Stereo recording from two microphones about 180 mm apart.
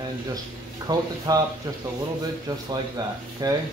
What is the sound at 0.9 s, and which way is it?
Speech, 20° right (ahead or behind).